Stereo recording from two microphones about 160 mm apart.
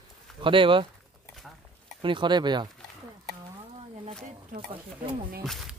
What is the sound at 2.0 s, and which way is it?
Speech, 30° right (ahead or behind).